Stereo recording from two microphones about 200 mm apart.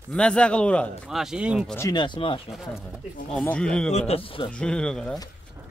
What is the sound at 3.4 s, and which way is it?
Speech, 5° left (ahead or behind).